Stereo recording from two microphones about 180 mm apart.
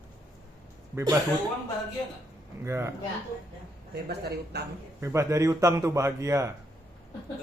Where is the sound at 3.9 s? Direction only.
65° right (ahead or behind).